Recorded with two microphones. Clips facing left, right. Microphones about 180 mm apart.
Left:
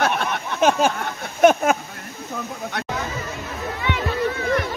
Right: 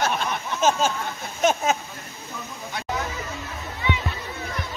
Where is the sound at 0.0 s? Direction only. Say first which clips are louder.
Left 3 dB; 60° left (ahead or behind).